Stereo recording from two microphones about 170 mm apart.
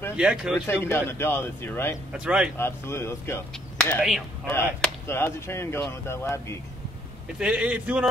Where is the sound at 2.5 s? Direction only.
15° left (ahead or behind).